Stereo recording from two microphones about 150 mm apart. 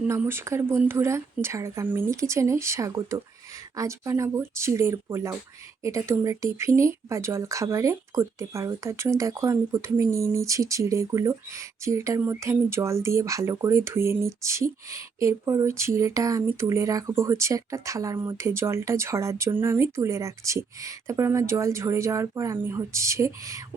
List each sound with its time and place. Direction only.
0.1 s speech: 15° right (ahead or behind)